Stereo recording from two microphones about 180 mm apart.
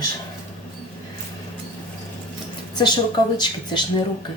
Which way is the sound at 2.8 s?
25° left (ahead or behind).